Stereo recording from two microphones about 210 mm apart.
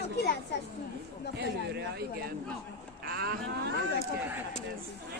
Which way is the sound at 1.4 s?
55° right (ahead or behind).